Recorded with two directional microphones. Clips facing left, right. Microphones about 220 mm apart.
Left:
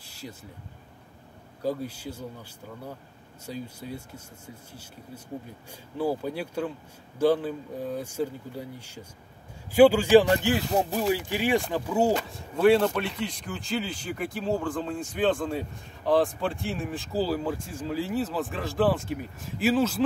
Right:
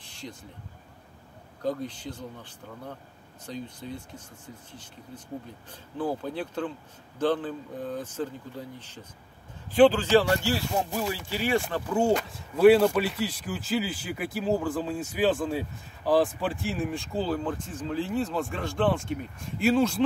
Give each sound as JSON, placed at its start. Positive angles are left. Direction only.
{"t": 0.0, "sound": "a sound", "side_deg": 5}
{"t": 1.6, "sound": "speech", "side_deg": 10}
{"t": 3.4, "sound": "speech", "side_deg": 10}
{"t": 5.9, "sound": "speech", "side_deg": 10}
{"t": 12.1, "sound": "speech", "side_deg": 0}